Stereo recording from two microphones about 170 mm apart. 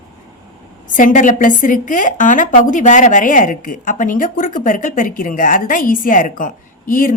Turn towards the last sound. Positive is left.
turn(degrees=55)  # may be behind; listen again after turning